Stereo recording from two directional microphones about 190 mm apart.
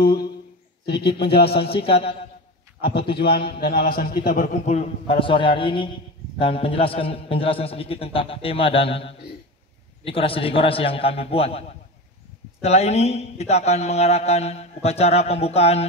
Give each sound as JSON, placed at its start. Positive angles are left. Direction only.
{"t": 0.0, "sound": "a man's voice", "side_deg": 55}
{"t": 1.5, "sound": "a man's voice", "side_deg": 30}
{"t": 2.8, "sound": "a man's voice", "side_deg": 55}
{"t": 12.6, "sound": "a man's voice", "side_deg": 35}